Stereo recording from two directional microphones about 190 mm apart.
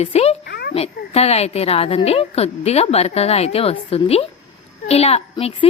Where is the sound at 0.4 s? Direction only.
55° left (ahead or behind).